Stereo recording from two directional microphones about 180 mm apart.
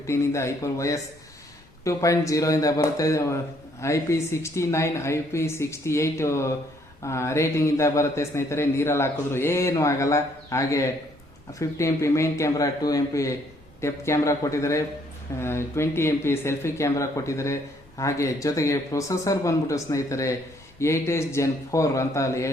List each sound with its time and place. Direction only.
0.1 s speech: 15° left (ahead or behind)